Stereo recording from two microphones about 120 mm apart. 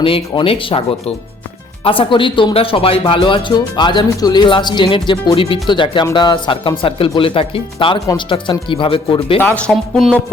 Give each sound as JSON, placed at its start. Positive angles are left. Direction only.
{"t": 0.0, "sound": "speech", "side_deg": 50}
{"t": 9.4, "sound": "speech", "side_deg": 15}
{"t": 9.7, "sound": "speech", "side_deg": 5}